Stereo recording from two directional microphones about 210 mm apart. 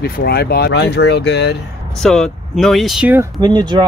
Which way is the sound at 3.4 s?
20° right (ahead or behind).